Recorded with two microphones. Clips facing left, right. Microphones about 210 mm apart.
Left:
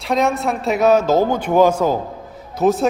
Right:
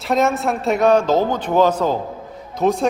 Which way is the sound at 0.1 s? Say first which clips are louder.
Even; centre (ahead or behind).